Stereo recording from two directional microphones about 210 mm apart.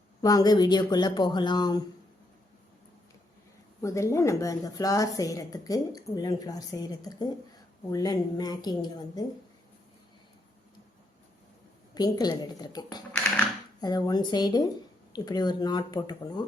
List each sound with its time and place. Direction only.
0.2 s speech: 20° left (ahead or behind)
3.8 s a woman's voice: 15° left (ahead or behind)
11.9 s speech: 20° left (ahead or behind)